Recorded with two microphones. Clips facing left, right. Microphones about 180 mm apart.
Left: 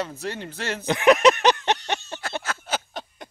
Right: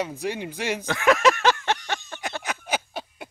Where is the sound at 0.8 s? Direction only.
20° left (ahead or behind).